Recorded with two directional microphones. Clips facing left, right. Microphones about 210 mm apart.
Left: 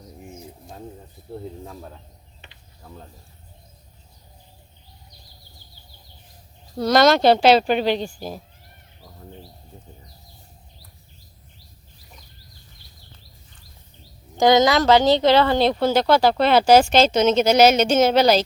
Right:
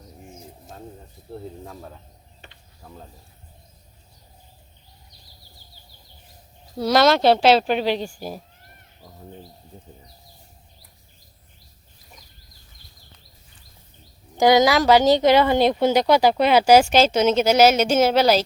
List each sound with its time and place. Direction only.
1.3 s speech: centre (ahead or behind)
6.7 s speech: 5° right (ahead or behind)
14.3 s speech: 10° right (ahead or behind)